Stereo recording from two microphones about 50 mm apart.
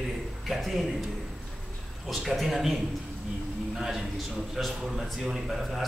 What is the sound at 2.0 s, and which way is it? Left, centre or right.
Speech, centre.